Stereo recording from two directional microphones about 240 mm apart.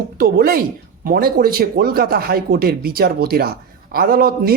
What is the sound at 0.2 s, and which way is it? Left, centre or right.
Speech, right.